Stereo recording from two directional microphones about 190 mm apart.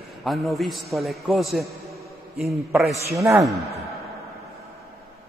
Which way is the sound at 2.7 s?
15° right (ahead or behind).